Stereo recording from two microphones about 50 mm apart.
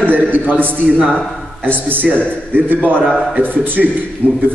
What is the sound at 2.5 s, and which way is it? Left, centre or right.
Speech, right.